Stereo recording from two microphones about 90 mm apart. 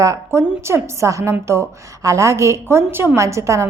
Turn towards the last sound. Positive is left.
turn(degrees=-35)  # may be behind; listen again after turning